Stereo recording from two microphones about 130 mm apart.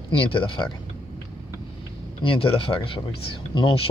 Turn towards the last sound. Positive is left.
turn(degrees=40)  # may be behind; listen again after turning